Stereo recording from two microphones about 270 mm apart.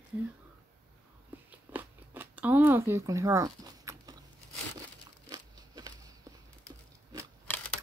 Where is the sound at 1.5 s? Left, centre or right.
Centre.